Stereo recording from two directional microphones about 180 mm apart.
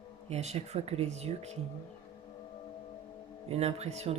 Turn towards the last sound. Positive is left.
turn(degrees=-35)  # may be behind; listen again after turning